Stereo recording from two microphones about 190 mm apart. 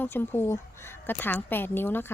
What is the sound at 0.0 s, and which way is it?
A woman's voice, 10° left (ahead or behind).